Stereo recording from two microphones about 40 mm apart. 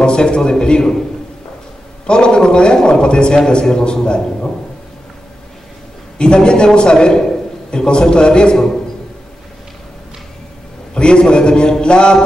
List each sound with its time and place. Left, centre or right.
0.0 s a man's voice: left
2.0 s a man's voice: left
6.1 s a man's voice: left
11.0 s a man's voice: left